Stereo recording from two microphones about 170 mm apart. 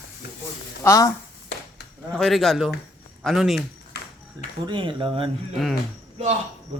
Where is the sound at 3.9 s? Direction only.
75° left (ahead or behind).